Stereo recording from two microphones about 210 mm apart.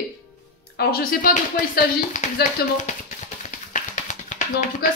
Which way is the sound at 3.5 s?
35° left (ahead or behind).